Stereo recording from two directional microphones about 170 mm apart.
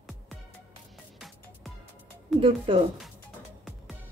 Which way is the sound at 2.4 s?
30° right (ahead or behind).